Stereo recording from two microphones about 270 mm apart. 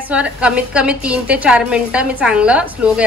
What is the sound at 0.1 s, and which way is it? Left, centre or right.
A woman's voice, centre.